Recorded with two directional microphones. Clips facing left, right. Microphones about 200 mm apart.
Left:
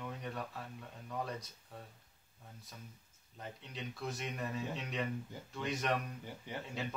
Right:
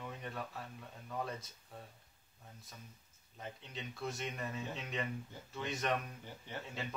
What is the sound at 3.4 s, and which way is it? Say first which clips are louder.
Speech: left 1 dB; centre (ahead or behind).